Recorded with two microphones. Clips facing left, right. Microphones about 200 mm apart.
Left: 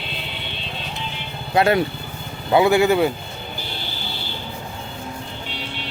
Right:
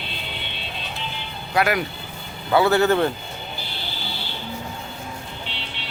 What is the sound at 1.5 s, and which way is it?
Speech, 25° left (ahead or behind).